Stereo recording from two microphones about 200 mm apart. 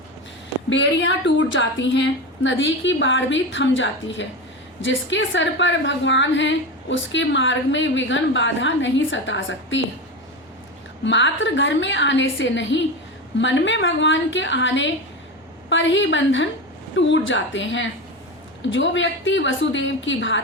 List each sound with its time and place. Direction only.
0.7 s a woman's voice: 65° left (ahead or behind)
11.0 s a woman's voice: 65° left (ahead or behind)